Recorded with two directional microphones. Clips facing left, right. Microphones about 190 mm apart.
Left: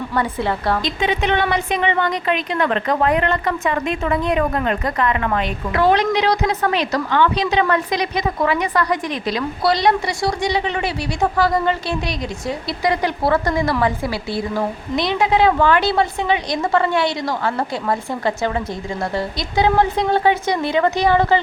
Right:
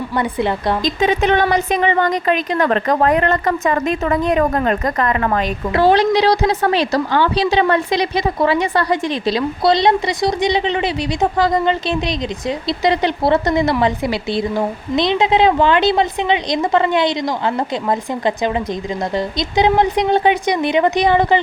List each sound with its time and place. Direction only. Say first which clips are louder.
0.2 s a woman's voice: right 2 dB; 20° right (ahead or behind)
0.9 s a woman's voice: right 4 dB; 45° right (ahead or behind); by 21.4 s 20° right (ahead or behind)